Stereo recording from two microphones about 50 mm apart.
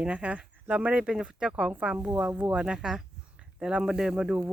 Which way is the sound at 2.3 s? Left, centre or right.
Right.